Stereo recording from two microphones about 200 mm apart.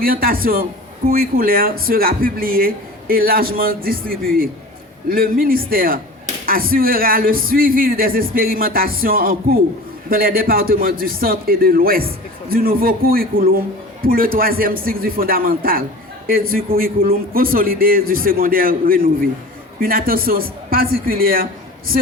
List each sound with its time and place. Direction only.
0.0 s a man's voice: 45° right (ahead or behind)